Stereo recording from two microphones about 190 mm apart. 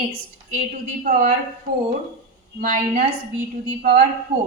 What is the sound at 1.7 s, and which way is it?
Speech, 50° right (ahead or behind).